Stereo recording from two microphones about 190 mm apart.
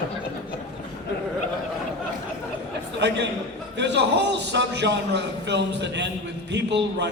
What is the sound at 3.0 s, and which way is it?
A man's voice, 65° right (ahead or behind).